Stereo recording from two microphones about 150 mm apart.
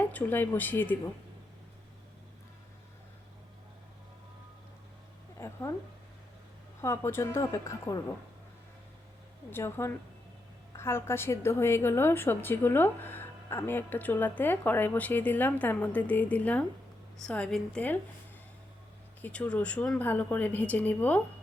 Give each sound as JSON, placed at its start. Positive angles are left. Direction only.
{"t": 0.0, "sound": "a woman's voice", "side_deg": 10}
{"t": 5.4, "sound": "a sound", "side_deg": 20}
{"t": 6.8, "sound": "speech", "side_deg": 15}
{"t": 9.5, "sound": "a woman's voice", "side_deg": 15}
{"t": 19.2, "sound": "a woman's voice", "side_deg": 10}